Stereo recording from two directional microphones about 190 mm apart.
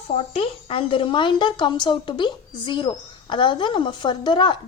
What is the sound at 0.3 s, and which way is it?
Speech, 30° left (ahead or behind).